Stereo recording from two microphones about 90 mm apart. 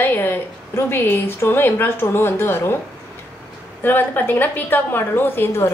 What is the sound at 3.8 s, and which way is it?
A woman's voice, 20° left (ahead or behind).